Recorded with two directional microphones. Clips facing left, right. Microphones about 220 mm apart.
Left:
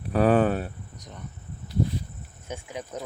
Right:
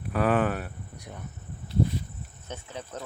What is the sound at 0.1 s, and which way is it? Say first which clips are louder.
Speech: left 4 dB; 30° left (ahead or behind).